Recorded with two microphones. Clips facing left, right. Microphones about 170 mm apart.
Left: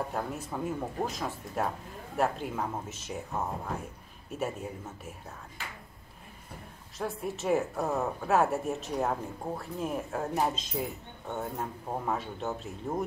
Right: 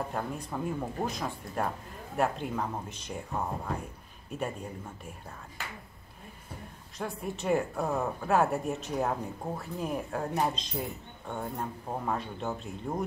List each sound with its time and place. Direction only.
0.1 s speech: 5° left (ahead or behind)
7.0 s speech: centre (ahead or behind)